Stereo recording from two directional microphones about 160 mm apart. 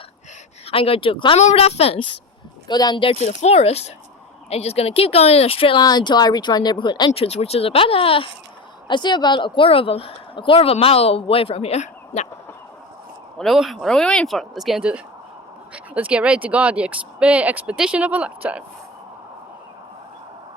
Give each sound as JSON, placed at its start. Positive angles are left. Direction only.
{"t": 0.7, "sound": "a woman's voice", "side_deg": 35}
{"t": 2.6, "sound": "a woman's voice", "side_deg": 25}
{"t": 7.1, "sound": "a woman's voice", "side_deg": 40}
{"t": 13.4, "sound": "speech", "side_deg": 0}